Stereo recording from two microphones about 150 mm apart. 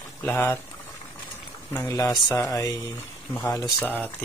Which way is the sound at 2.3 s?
20° left (ahead or behind).